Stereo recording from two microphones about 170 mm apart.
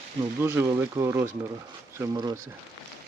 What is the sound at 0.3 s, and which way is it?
Speech, 15° right (ahead or behind).